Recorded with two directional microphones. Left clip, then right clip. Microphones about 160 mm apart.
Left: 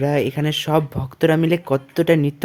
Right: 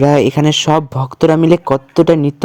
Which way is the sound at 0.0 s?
50° right (ahead or behind).